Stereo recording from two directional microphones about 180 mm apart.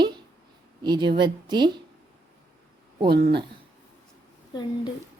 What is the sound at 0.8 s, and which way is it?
A woman's voice, 25° right (ahead or behind).